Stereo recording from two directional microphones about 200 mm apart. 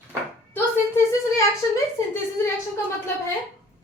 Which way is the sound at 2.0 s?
15° left (ahead or behind).